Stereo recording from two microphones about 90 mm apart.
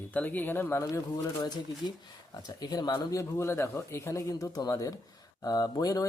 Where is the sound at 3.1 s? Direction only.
30° left (ahead or behind).